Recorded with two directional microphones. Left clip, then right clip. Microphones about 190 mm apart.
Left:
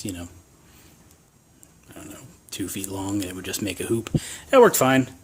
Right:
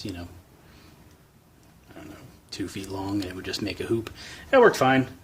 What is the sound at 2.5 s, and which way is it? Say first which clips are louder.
Speech: left 2 dB; 40° left (ahead or behind).